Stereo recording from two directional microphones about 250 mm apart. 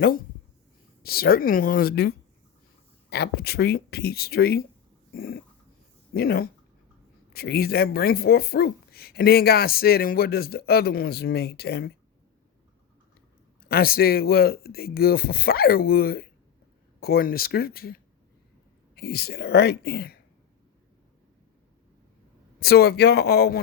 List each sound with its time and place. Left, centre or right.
1.0 s speech: left
13.7 s speech: left
22.6 s speech: left